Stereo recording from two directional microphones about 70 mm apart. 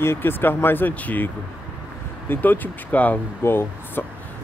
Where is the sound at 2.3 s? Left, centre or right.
Left.